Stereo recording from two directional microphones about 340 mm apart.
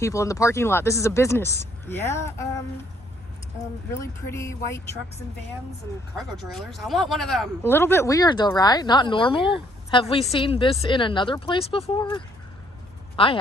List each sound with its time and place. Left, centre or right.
0.0 s speech: centre
4.3 s speech: centre
6.1 s speech: centre